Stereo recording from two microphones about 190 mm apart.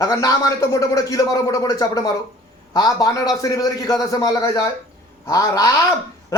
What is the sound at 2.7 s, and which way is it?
A man's voice, 20° left (ahead or behind).